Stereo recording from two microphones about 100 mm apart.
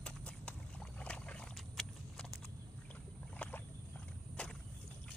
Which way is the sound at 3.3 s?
15° left (ahead or behind).